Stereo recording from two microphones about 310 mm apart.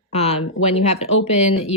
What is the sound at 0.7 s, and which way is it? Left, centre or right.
Speech, centre.